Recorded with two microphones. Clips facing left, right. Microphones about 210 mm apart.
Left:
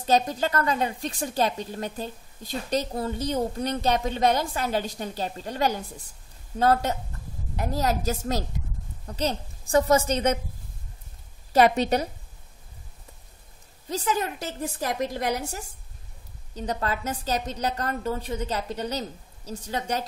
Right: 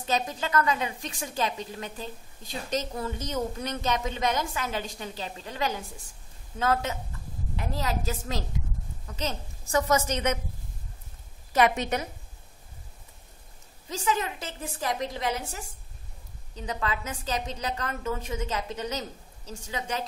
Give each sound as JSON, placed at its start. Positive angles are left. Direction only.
{"t": 0.0, "sound": "a woman's voice", "side_deg": 40}
{"t": 11.5, "sound": "a woman's voice", "side_deg": 35}
{"t": 13.8, "sound": "a woman's voice", "side_deg": 40}